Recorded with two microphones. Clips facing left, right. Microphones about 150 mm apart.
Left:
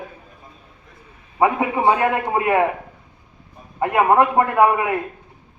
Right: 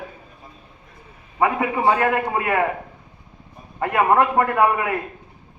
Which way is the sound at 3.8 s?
20° left (ahead or behind).